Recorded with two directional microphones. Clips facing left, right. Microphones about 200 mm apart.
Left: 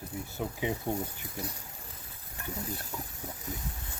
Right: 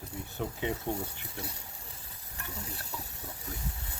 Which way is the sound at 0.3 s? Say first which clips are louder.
Even; 10° left (ahead or behind).